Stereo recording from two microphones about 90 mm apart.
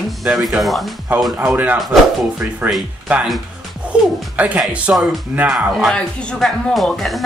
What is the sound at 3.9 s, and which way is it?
Music, 15° right (ahead or behind).